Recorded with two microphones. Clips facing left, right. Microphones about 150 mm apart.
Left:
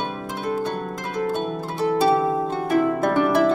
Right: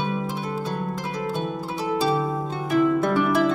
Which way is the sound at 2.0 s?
50° left (ahead or behind).